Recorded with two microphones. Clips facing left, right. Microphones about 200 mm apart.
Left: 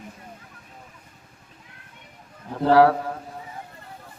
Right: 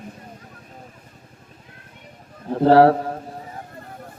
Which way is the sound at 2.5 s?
35° right (ahead or behind).